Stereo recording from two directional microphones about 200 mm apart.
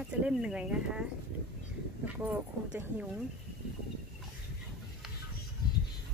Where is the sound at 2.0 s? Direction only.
5° right (ahead or behind).